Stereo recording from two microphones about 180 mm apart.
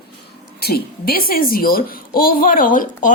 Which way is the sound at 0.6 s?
55° left (ahead or behind).